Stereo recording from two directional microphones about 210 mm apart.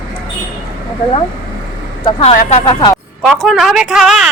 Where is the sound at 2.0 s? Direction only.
30° left (ahead or behind).